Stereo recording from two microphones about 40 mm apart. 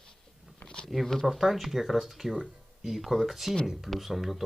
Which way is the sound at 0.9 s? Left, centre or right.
Centre.